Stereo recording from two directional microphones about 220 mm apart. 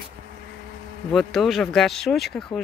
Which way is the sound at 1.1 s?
Centre (ahead or behind).